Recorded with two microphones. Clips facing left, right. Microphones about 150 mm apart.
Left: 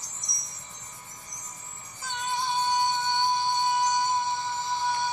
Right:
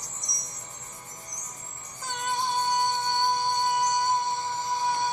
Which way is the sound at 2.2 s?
50° right (ahead or behind).